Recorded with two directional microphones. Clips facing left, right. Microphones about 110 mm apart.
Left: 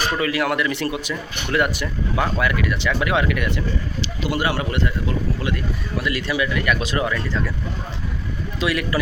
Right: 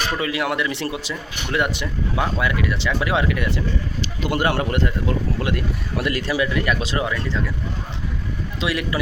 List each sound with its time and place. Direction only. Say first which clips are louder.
0.2 s speech: left 2 dB; 20° right (ahead or behind)
4.0 s speech: right 2 dB; 50° right (ahead or behind)
6.1 s speech: right 1 dB; 40° right (ahead or behind); by 7.4 s 20° right (ahead or behind)
8.6 s speech: left 2 dB; 20° right (ahead or behind)